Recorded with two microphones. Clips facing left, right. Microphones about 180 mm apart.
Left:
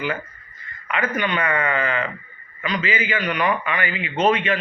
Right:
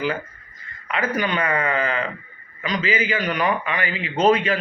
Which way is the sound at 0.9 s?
35° right (ahead or behind).